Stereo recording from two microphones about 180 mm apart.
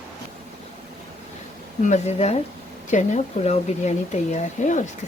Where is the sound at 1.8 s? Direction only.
40° left (ahead or behind).